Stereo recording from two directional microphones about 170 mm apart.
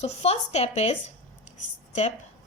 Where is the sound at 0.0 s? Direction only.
40° left (ahead or behind).